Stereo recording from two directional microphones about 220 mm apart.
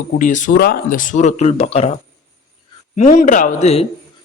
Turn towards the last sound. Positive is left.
turn(degrees=30)  # may be behind; listen again after turning